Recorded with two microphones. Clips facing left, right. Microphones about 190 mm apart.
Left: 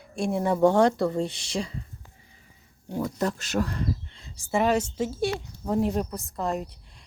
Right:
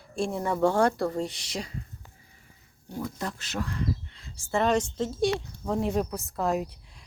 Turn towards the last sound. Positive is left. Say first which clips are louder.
# right 2 dB
turn(degrees=0)  # may be behind; listen again after turning